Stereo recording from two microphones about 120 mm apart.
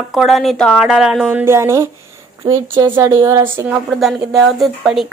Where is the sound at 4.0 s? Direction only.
5° right (ahead or behind).